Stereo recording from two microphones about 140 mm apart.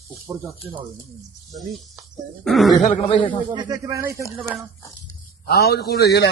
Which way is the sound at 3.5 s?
30° right (ahead or behind).